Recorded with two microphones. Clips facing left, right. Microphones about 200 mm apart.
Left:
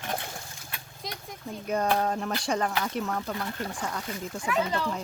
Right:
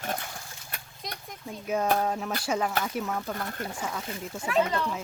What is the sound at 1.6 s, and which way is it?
Speech, 5° right (ahead or behind).